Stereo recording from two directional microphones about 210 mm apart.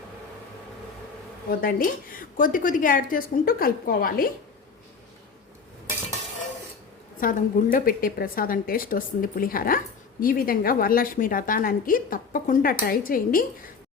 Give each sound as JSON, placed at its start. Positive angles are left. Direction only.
{"t": 1.5, "sound": "a woman's voice", "side_deg": 45}
{"t": 7.2, "sound": "a woman's voice", "side_deg": 40}